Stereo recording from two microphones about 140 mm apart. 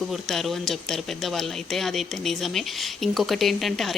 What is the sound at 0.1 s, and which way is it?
A woman's voice, centre (ahead or behind).